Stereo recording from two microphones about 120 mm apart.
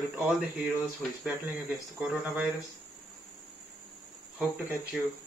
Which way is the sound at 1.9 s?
15° right (ahead or behind).